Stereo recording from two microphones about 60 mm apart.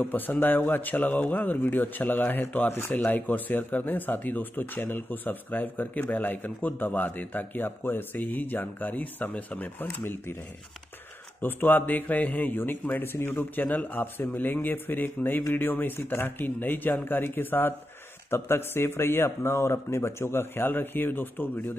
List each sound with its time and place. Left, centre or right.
0.0 s speech: left
11.4 s speech: left